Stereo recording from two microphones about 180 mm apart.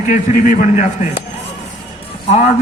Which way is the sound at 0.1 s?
50° left (ahead or behind).